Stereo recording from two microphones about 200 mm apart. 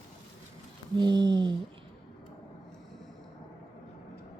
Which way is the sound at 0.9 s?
20° right (ahead or behind).